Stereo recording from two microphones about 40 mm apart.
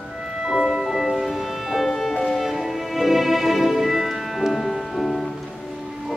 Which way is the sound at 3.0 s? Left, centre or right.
Centre.